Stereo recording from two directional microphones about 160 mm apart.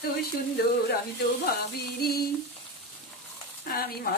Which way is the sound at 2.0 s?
75° left (ahead or behind).